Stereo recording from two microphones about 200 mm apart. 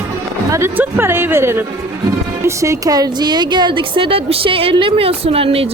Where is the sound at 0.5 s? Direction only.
10° right (ahead or behind).